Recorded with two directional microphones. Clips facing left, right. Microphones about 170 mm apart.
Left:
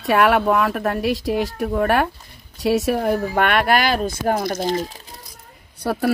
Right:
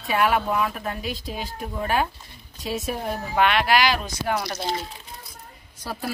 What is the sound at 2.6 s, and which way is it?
Speech, 85° left.